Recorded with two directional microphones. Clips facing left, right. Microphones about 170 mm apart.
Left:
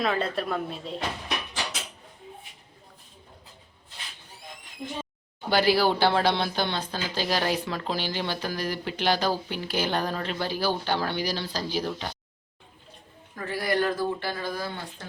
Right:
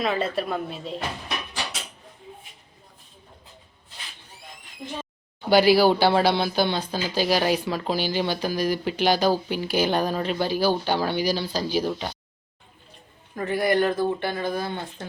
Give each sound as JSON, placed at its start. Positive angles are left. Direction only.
{"t": 0.0, "sound": "a woman's voice", "side_deg": 0}
{"t": 5.5, "sound": "speech", "side_deg": -10}
{"t": 13.3, "sound": "speech", "side_deg": -20}